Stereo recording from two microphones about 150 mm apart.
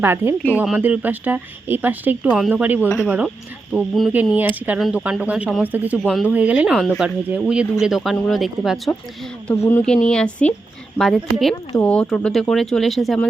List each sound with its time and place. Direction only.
0.0 s speech: 15° right (ahead or behind)
6.0 s speech: centre (ahead or behind)
9.6 s speech: 15° left (ahead or behind)
10.1 s speech: 5° left (ahead or behind)